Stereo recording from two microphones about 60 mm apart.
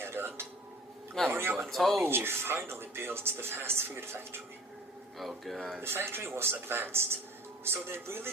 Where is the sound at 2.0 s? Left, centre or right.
Right.